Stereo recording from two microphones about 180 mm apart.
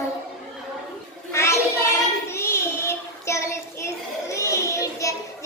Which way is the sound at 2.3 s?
15° left (ahead or behind).